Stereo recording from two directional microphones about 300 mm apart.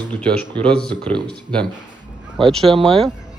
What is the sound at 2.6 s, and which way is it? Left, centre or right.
Speech, centre.